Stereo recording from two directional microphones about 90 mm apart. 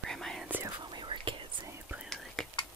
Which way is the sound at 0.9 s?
60° right (ahead or behind).